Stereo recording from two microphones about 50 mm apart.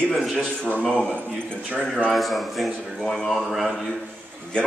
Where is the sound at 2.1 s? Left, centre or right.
Centre.